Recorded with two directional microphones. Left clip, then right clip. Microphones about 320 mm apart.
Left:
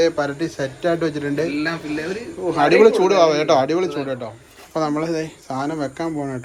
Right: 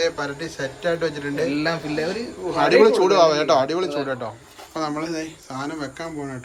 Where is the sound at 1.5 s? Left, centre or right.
Right.